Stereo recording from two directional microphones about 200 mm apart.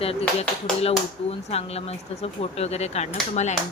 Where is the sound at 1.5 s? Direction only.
30° left (ahead or behind).